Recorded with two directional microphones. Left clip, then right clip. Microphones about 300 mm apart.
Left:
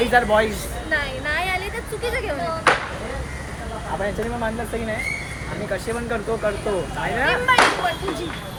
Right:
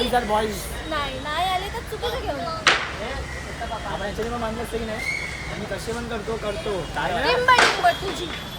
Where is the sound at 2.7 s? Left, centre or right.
Centre.